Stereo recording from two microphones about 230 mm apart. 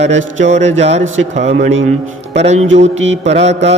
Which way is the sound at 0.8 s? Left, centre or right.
Right.